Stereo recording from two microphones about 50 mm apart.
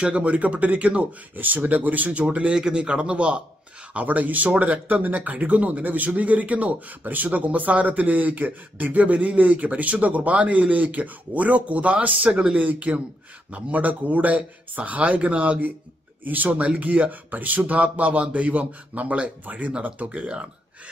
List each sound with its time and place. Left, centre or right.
0.0 s speech: right
1.3 s speech: right
2.5 s speech: centre